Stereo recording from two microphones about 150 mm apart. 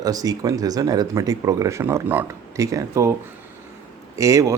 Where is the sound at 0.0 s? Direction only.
25° right (ahead or behind).